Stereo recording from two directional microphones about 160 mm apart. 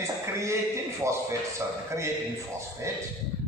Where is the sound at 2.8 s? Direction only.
15° right (ahead or behind).